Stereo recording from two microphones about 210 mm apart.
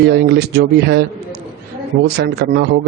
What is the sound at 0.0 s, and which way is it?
A man's voice, 50° right (ahead or behind).